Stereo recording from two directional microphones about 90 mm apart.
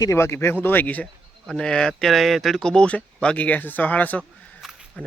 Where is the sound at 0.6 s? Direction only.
20° left (ahead or behind).